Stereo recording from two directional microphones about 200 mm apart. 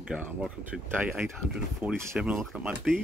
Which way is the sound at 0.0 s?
5° right (ahead or behind).